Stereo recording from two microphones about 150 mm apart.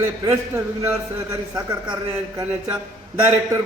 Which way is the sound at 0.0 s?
15° right (ahead or behind).